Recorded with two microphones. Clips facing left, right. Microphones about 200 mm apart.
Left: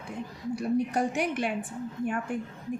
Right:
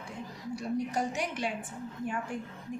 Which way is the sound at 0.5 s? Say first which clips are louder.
Left 5 dB; 60° left (ahead or behind).